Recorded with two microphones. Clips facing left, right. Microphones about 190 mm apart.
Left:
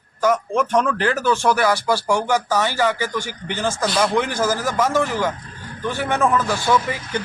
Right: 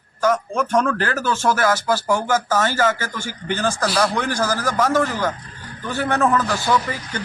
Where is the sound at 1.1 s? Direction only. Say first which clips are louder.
Left 2 dB; 15° left (ahead or behind).